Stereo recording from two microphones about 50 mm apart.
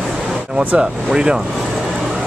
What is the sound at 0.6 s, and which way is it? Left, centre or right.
Speech, right.